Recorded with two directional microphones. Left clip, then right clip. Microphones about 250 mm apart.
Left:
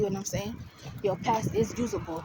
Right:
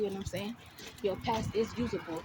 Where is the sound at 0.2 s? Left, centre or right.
Left.